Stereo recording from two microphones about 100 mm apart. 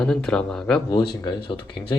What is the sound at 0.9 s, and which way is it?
Speech, 40° left (ahead or behind).